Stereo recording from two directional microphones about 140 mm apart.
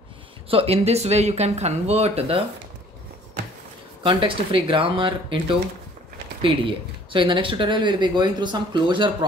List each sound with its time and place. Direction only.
0.5 s speech: 45° right (ahead or behind)
4.0 s speech: 35° right (ahead or behind)